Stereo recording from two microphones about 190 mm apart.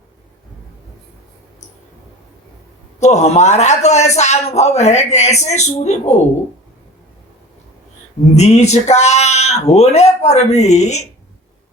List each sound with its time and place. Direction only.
3.0 s a man's voice: 35° left (ahead or behind)
8.4 s a man's voice: 35° left (ahead or behind)